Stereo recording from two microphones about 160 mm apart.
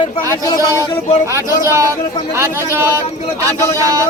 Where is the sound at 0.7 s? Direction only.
20° right (ahead or behind).